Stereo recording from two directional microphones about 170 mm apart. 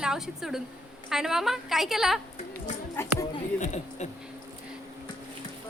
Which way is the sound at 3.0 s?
15° left (ahead or behind).